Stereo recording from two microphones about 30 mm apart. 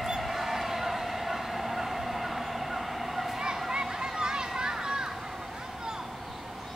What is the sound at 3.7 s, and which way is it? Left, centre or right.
Children playing, right.